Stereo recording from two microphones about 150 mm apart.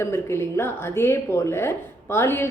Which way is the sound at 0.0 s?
20° left (ahead or behind).